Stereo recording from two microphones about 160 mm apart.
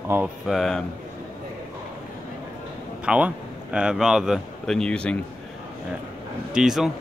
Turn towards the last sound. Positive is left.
turn(degrees=-5)  # may be behind; listen again after turning